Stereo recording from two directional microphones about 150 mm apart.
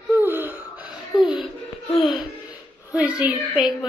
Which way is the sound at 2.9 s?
10° right (ahead or behind).